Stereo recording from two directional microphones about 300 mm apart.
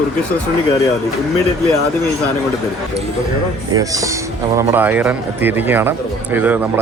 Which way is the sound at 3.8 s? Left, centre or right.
Centre.